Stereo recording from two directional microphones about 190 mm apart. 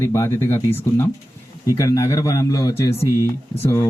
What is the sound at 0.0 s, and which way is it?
A man's voice, 15° left (ahead or behind).